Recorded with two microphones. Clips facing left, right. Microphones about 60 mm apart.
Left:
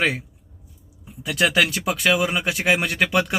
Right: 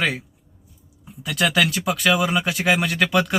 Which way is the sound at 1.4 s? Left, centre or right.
Left.